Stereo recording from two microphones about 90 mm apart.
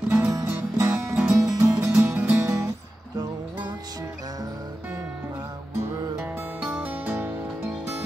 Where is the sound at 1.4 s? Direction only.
40° right (ahead or behind).